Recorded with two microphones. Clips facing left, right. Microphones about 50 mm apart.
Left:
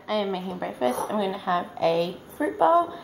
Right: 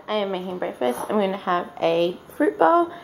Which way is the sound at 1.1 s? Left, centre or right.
Right.